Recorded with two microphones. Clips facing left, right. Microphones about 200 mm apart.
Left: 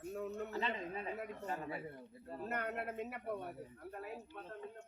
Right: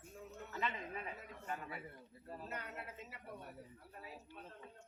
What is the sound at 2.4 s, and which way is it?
Speech, 60° left (ahead or behind).